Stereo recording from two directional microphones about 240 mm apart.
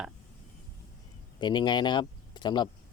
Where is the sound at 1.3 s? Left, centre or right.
Centre.